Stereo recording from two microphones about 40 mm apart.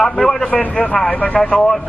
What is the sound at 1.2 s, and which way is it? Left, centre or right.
Speech, left.